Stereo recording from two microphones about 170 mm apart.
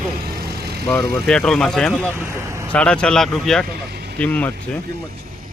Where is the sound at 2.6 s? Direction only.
5° left (ahead or behind).